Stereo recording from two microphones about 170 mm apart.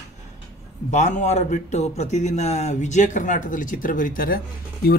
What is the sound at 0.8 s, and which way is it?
A man's voice, 45° left (ahead or behind).